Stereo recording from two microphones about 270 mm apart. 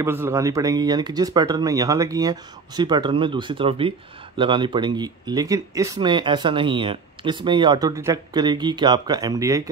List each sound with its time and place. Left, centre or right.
0.0 s speech: centre